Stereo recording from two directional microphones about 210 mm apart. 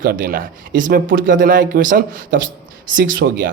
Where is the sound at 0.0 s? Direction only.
45° right (ahead or behind).